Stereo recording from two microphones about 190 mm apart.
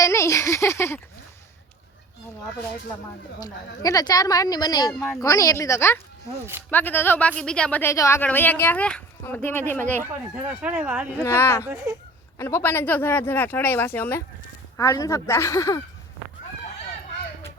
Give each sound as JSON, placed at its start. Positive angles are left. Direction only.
{"t": 0.0, "sound": "a sound", "side_deg": 15}
{"t": 3.4, "sound": "speech", "side_deg": 20}
{"t": 10.0, "sound": "speech", "side_deg": -10}
{"t": 11.2, "sound": "speech", "side_deg": 15}
{"t": 11.6, "sound": "speech", "side_deg": -15}
{"t": 12.4, "sound": "speech", "side_deg": 10}